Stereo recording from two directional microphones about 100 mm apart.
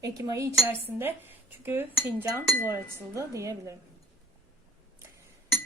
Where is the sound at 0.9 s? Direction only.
20° right (ahead or behind).